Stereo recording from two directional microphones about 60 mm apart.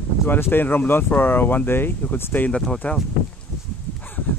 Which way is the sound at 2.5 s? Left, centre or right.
Centre.